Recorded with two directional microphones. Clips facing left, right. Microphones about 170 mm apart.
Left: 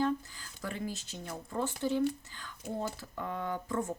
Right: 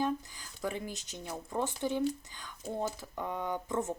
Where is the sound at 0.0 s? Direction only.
15° right (ahead or behind).